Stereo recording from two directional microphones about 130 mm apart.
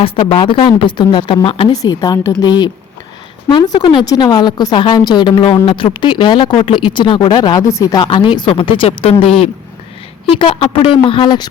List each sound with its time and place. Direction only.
0.0 s speech: 40° left (ahead or behind)
1.7 s a woman's voice: 30° left (ahead or behind)
8.0 s speech: 40° left (ahead or behind)
10.3 s speech: 40° left (ahead or behind)